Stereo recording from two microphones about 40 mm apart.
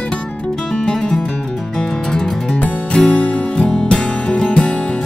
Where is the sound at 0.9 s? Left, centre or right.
Centre.